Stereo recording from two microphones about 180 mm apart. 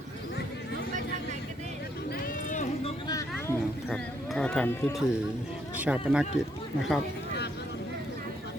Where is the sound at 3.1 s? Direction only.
20° left (ahead or behind).